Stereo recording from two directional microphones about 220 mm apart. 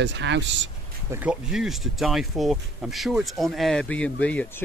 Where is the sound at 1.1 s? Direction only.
5° right (ahead or behind).